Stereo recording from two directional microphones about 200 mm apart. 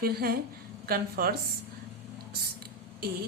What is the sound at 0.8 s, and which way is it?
Speech, 50° right (ahead or behind).